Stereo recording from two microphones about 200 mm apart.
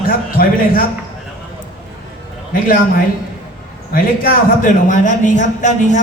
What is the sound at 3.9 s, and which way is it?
A man's voice, 45° left (ahead or behind).